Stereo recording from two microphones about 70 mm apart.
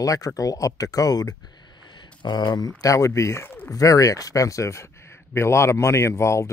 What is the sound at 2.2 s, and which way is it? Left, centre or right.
Speech, left.